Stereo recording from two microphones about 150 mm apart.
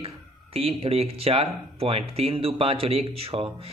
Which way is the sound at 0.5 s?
40° right (ahead or behind).